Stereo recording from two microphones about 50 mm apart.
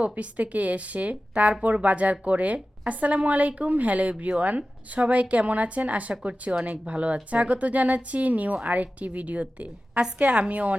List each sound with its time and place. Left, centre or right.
0.0 s speech: right